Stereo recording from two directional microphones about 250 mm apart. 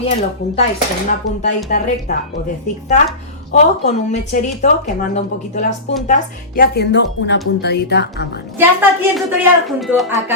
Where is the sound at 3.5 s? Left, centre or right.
Left.